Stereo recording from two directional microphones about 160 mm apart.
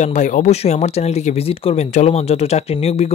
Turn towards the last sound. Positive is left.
turn(degrees=40)  # may be behind; listen again after turning